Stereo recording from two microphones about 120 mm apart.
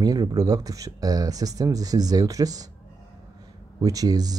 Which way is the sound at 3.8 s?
30° right (ahead or behind).